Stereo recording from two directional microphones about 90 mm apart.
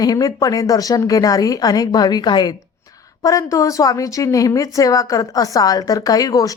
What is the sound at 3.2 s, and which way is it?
Speech, 40° left (ahead or behind).